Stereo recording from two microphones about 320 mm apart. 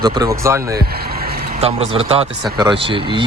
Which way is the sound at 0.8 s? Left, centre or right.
Right.